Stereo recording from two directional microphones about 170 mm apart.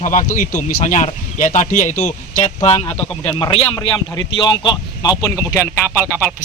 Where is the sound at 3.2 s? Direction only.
30° left (ahead or behind).